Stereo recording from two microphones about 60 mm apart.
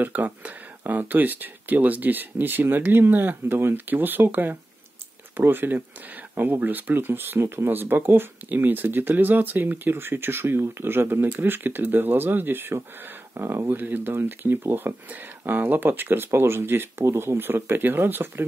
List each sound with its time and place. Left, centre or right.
0.0 s speech: right
17.0 s speech: right